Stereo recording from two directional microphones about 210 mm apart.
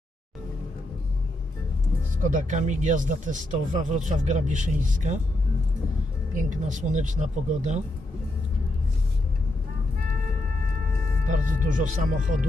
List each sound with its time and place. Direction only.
2.2 s speech: 35° right (ahead or behind)
6.3 s speech: 35° right (ahead or behind)
11.2 s speech: 40° right (ahead or behind)